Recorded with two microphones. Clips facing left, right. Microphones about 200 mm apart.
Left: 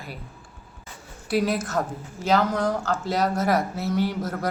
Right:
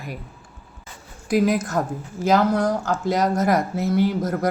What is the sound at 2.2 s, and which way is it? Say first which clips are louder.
Speech: right 3 dB; 10° right (ahead or behind).